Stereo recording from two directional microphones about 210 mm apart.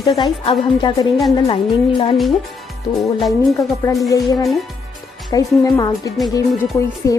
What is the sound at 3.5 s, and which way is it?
Speech, 15° left (ahead or behind).